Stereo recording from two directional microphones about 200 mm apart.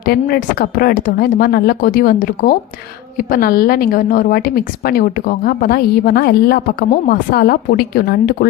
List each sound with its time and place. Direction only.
0.0 s a woman's voice: 50° left (ahead or behind)